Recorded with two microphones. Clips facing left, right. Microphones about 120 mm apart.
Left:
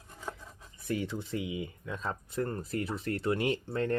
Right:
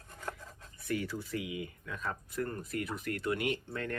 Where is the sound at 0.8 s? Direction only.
20° left (ahead or behind).